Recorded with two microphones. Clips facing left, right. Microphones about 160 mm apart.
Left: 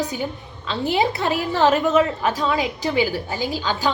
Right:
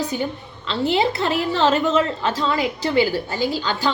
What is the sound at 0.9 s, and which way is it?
A woman's voice, 10° left (ahead or behind).